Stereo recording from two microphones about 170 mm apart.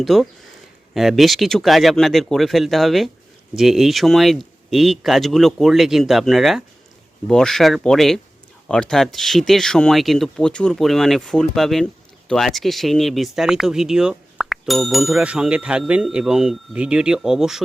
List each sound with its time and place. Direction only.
0.0 s speech: centre (ahead or behind)